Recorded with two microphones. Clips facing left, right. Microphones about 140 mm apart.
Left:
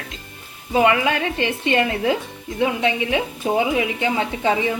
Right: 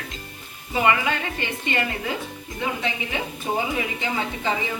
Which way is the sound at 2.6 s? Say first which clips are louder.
Left 8 dB; 70° left (ahead or behind).